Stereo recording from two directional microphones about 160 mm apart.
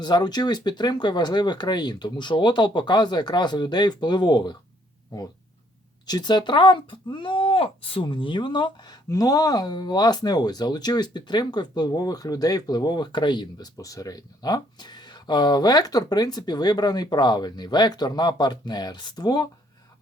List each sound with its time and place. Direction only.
0.0 s speech: 25° left (ahead or behind)
6.1 s speech: 25° left (ahead or behind)